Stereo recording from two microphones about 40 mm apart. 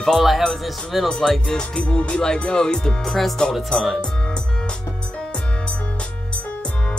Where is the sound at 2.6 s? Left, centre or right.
Centre.